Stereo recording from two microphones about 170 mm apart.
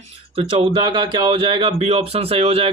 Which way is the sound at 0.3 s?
30° right (ahead or behind).